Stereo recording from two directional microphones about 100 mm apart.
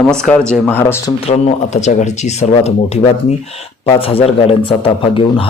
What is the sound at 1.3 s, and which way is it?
Speech, 90° left.